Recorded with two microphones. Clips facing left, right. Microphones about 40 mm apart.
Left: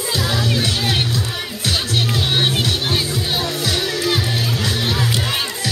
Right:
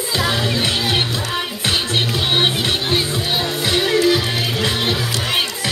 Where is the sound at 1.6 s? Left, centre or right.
Right.